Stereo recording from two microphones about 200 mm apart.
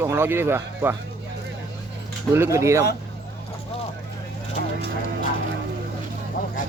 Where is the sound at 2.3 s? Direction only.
15° right (ahead or behind).